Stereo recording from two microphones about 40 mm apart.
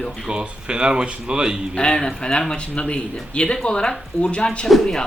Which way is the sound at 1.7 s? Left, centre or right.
Left.